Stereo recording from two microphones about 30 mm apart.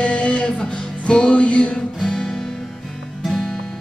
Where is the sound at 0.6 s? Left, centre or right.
Left.